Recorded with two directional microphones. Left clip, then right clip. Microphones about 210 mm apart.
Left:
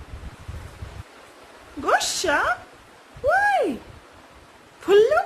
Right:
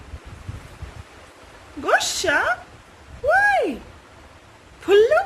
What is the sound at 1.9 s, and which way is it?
Speech, 15° left (ahead or behind).